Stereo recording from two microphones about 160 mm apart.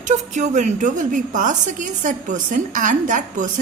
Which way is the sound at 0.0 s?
50° right (ahead or behind).